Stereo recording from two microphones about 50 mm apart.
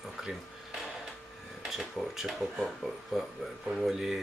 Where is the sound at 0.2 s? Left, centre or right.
Centre.